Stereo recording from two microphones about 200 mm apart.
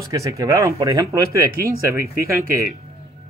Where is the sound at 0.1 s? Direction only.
15° right (ahead or behind).